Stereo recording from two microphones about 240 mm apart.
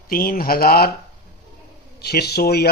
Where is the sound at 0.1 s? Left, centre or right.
Left.